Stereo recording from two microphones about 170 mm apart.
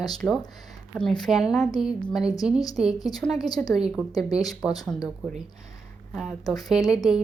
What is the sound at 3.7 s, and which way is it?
Speech, 5° right (ahead or behind).